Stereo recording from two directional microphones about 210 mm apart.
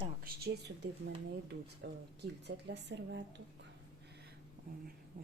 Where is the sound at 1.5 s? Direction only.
55° right (ahead or behind).